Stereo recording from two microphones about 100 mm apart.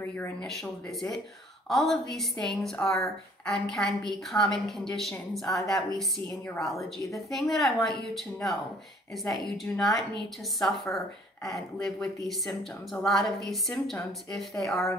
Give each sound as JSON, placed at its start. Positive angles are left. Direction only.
{"t": 0.0, "sound": "speech", "side_deg": 20}
{"t": 0.4, "sound": "a woman's voice", "side_deg": 5}
{"t": 1.7, "sound": "a woman's voice", "side_deg": 0}
{"t": 7.2, "sound": "a woman's voice", "side_deg": 0}